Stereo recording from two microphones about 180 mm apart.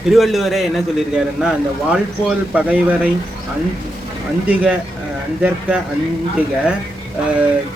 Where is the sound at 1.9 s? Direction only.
5° right (ahead or behind).